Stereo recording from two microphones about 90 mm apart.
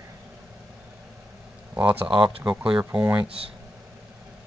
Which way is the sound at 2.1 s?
55° right (ahead or behind).